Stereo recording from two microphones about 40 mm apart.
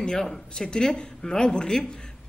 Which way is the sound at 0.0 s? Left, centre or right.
Centre.